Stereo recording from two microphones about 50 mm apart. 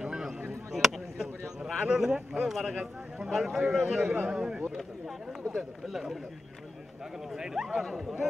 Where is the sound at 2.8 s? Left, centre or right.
Centre.